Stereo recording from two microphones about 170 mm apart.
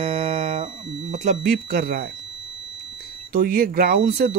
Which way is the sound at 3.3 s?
55° right (ahead or behind).